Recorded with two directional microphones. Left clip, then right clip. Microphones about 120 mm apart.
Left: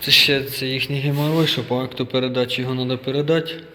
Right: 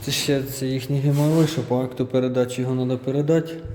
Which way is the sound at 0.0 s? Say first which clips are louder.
Left 8 dB; 30° right (ahead or behind).